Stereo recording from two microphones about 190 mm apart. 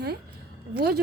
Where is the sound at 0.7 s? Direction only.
55° right (ahead or behind).